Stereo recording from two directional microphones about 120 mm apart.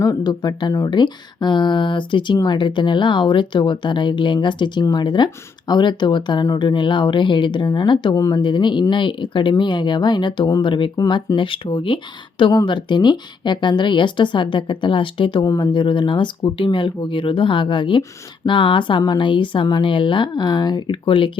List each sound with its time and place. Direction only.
0.0 s speech: 30° left (ahead or behind)